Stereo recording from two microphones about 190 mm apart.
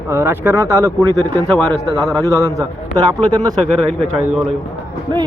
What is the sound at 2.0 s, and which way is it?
Speech, centre (ahead or behind).